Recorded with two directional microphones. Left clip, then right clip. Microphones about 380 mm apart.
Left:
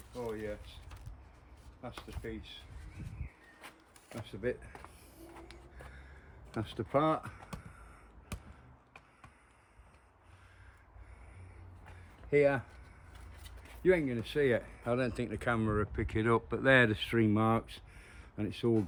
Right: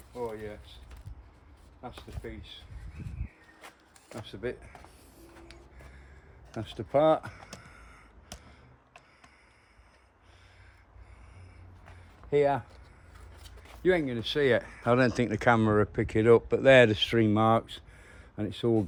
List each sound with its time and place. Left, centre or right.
0.1 s speech: centre
1.8 s speech: centre
4.1 s speech: centre
6.6 s a sound: centre
12.3 s speech: centre
13.8 s speech: centre